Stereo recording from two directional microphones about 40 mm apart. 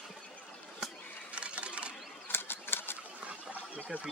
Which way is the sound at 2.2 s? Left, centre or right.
Left.